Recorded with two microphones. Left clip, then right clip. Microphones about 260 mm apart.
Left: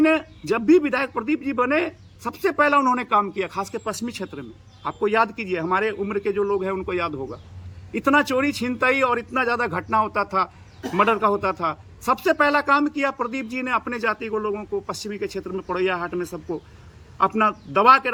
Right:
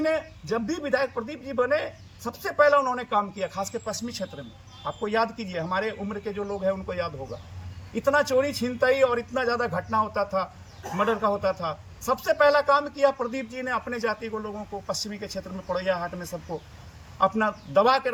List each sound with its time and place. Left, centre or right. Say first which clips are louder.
0.0 s a man's voice: left 6 dB; left